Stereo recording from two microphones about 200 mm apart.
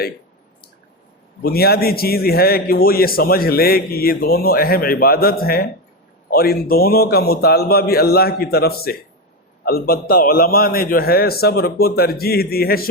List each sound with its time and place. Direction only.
1.4 s a man's voice: 50° left (ahead or behind)